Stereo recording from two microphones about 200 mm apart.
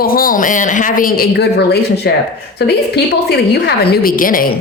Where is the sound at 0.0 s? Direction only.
45° left (ahead or behind).